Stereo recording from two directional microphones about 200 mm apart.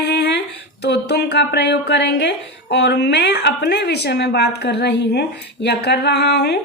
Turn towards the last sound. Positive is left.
turn(degrees=55)  # may be behind; listen again after turning